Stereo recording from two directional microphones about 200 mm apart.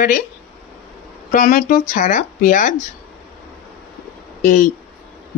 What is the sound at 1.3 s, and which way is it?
Speech, 45° left (ahead or behind).